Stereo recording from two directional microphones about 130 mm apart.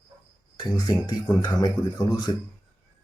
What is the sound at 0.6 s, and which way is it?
Speech, 30° left (ahead or behind).